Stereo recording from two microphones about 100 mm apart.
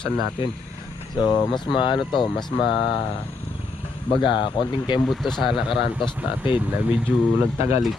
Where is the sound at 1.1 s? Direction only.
45° left (ahead or behind).